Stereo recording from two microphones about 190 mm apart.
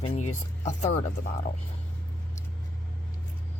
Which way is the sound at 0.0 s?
35° left (ahead or behind).